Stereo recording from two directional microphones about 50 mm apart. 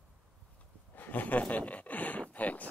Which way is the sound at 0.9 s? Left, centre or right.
Left.